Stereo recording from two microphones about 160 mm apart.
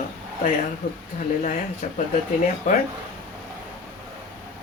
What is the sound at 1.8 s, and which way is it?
Speech, 45° left (ahead or behind).